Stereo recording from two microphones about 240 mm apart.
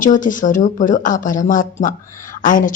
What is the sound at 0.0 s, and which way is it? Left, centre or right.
A woman's voice, left.